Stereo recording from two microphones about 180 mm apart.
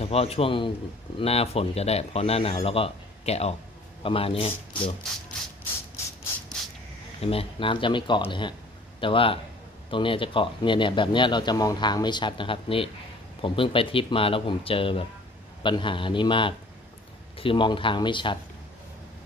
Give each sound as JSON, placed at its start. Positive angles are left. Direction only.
{"t": 0.0, "sound": "speech", "side_deg": 35}
{"t": 7.2, "sound": "a man's voice", "side_deg": 30}